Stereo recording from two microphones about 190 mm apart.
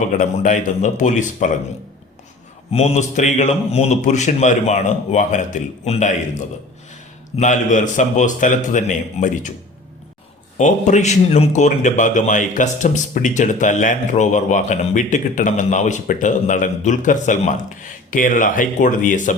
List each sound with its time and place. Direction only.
0.2 s speech: 40° left (ahead or behind)
2.7 s speech: 35° left (ahead or behind)
7.3 s speech: 40° left (ahead or behind)
10.6 s speech: 40° left (ahead or behind)